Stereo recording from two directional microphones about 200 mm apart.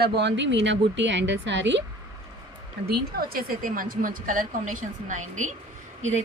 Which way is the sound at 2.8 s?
50° right (ahead or behind).